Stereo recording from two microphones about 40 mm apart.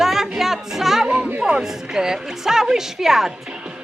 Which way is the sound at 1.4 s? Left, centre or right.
Centre.